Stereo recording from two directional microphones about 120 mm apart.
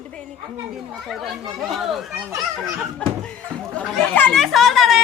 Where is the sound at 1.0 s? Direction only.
Centre (ahead or behind).